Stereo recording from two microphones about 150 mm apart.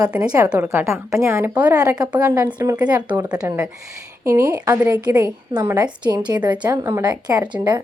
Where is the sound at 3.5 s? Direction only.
20° right (ahead or behind).